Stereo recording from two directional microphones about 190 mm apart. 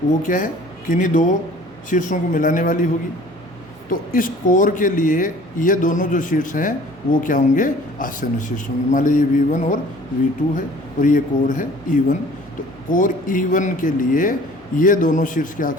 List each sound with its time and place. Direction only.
0.2 s a man's voice: 45° left (ahead or behind)
11.0 s a man's voice: 40° left (ahead or behind)